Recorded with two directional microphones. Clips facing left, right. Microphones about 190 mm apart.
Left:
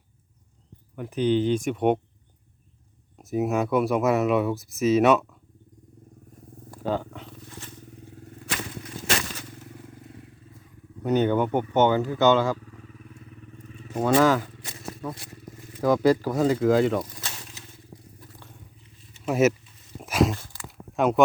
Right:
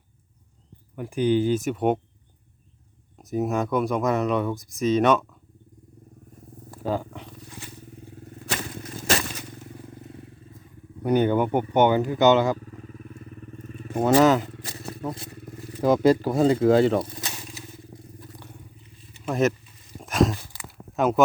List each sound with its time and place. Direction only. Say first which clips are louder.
0.9 s speech: right 1 dB; 10° right (ahead or behind)
3.2 s speech: left 1 dB; centre (ahead or behind)
6.7 s speech: even; 5° right (ahead or behind)
7.3 s a sound: right 1 dB; 10° right (ahead or behind)
8.4 s a sound: right 2 dB; 40° right (ahead or behind)
11.0 s speech: right 1 dB; 10° right (ahead or behind)
12.5 s motorcycle: right 5 dB; 40° right (ahead or behind)
14.2 s speech: right 2 dB; 20° right (ahead or behind)
14.6 s a sound: right 4 dB; 35° right (ahead or behind)
15.0 s speech: right 4 dB; 25° right (ahead or behind)
17.2 s vehicle: right 3 dB; 15° right (ahead or behind)
19.2 s speech: left 2 dB; 5° left (ahead or behind)
20.0 s a sound: right 1 dB; 5° left (ahead or behind)